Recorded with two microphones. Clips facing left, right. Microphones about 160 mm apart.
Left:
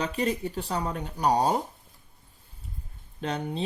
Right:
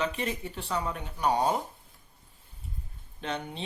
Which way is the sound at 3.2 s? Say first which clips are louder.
Left 4 dB; 35° left (ahead or behind).